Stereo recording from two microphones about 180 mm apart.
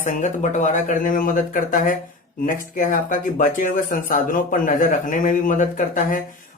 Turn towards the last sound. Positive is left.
turn(degrees=45)  # may be behind; listen again after turning